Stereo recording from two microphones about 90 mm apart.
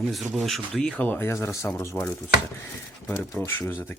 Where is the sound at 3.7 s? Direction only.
20° left (ahead or behind).